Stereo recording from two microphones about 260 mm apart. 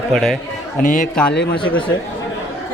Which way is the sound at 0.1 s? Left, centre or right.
Centre.